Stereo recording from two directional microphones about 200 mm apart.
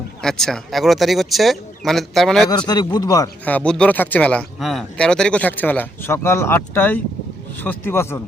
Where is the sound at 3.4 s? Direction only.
5° left (ahead or behind).